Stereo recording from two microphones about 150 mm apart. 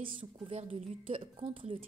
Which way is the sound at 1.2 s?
35° right (ahead or behind).